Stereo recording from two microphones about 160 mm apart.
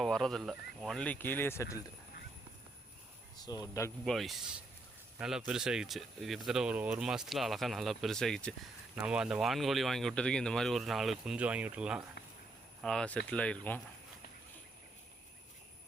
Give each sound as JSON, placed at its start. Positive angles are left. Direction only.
{"t": 0.0, "sound": "speech", "side_deg": 5}
{"t": 3.3, "sound": "speech", "side_deg": 25}
{"t": 4.0, "sound": "speech", "side_deg": 0}
{"t": 9.0, "sound": "speech", "side_deg": -5}